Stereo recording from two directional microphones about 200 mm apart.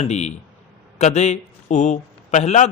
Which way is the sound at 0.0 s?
35° left (ahead or behind).